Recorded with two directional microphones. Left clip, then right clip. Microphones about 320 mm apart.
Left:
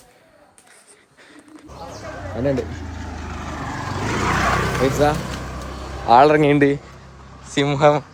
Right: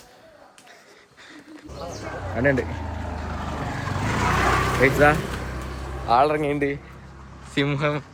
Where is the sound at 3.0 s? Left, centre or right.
Centre.